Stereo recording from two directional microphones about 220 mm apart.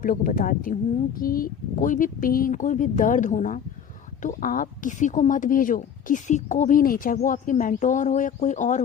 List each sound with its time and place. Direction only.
0.0 s a woman's voice: 40° left (ahead or behind)